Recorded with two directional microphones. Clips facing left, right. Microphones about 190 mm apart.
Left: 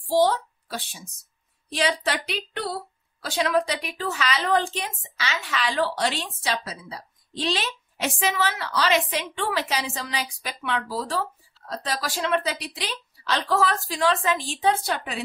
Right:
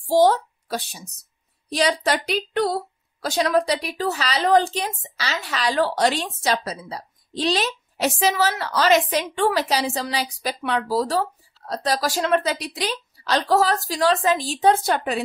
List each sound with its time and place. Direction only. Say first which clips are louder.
0.1 s a woman's voice: right 4 dB; 45° right (ahead or behind)